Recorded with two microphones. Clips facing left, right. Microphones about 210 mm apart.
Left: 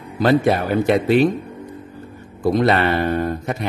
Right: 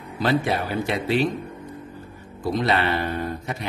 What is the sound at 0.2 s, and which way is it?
Speech, 45° left (ahead or behind).